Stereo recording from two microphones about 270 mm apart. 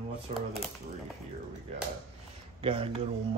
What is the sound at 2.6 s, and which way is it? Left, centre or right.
Speech, centre.